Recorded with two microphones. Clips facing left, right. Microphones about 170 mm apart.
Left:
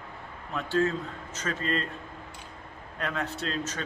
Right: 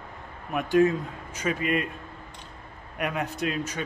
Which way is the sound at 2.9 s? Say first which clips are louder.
Right 3 dB; 15° right (ahead or behind).